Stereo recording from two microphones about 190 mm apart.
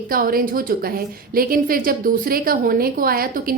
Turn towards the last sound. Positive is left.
turn(degrees=-50)  # may be behind; listen again after turning